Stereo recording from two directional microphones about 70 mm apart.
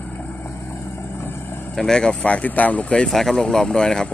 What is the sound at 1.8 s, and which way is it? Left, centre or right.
Speech, centre.